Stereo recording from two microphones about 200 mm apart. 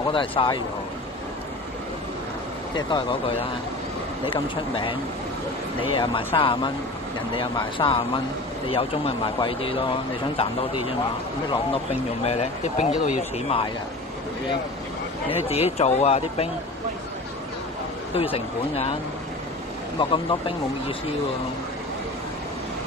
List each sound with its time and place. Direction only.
0.1 s speech: 25° left (ahead or behind)
2.7 s speech: 20° left (ahead or behind); by 13.6 s 35° left (ahead or behind)
15.2 s speech: 30° left (ahead or behind)
18.1 s speech: 30° left (ahead or behind)
20.0 s speech: 25° left (ahead or behind)